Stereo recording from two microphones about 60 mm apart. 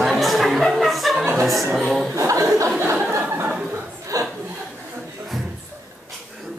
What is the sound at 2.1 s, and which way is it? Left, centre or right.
Speech, right.